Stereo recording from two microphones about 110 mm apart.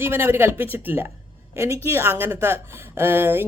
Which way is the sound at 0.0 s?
20° right (ahead or behind).